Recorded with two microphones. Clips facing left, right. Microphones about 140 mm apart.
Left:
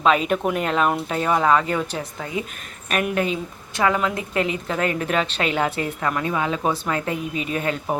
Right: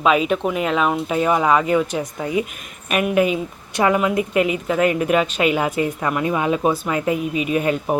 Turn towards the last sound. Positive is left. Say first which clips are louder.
# right 5 dB
turn(degrees=-15)  # may be behind; listen again after turning